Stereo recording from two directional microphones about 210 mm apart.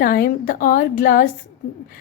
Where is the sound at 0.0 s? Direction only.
40° left (ahead or behind).